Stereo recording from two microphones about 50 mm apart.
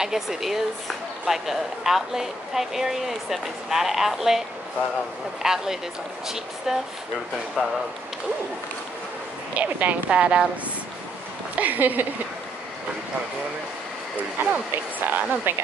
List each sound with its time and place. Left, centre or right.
0.0 s speech: centre
5.4 s speech: centre
7.6 s speech: centre
9.5 s speech: right
11.5 s speech: right
14.4 s speech: right